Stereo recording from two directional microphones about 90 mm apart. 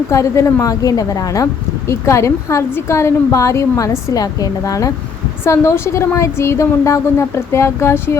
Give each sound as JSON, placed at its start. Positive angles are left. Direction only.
{"t": 0.1, "sound": "a woman's voice", "side_deg": 35}